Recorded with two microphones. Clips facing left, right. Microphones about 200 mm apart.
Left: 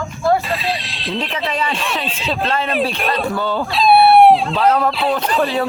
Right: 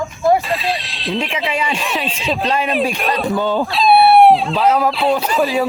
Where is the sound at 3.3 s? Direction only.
15° right (ahead or behind).